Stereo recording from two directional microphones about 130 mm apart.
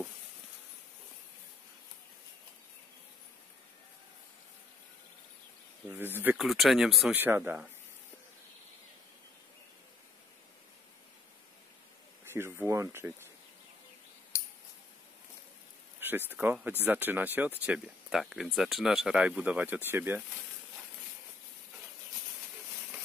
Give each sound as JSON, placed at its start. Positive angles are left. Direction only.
{"t": 5.9, "sound": "speech", "side_deg": -15}
{"t": 6.3, "sound": "speech", "side_deg": 0}
{"t": 7.2, "sound": "speech", "side_deg": -15}
{"t": 12.3, "sound": "speech", "side_deg": -20}
{"t": 14.3, "sound": "coin", "side_deg": 20}
{"t": 16.0, "sound": "speech", "side_deg": -15}
{"t": 17.7, "sound": "speech", "side_deg": 0}